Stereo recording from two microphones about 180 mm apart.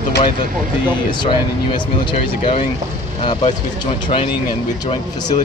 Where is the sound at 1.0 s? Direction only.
25° left (ahead or behind).